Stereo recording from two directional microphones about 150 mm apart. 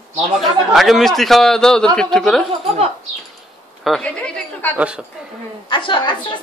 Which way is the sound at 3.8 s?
Centre (ahead or behind).